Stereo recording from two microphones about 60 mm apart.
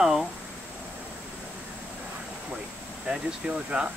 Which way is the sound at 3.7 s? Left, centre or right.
Centre.